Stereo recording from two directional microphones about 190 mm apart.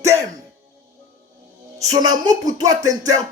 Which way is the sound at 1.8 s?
20° right (ahead or behind).